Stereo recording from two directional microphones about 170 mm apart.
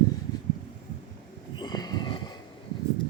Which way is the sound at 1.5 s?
25° left (ahead or behind).